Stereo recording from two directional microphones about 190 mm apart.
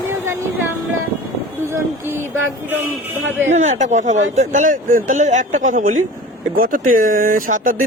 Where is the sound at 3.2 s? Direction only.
80° right.